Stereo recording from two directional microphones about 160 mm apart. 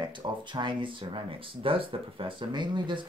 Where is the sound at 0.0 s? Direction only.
30° right (ahead or behind).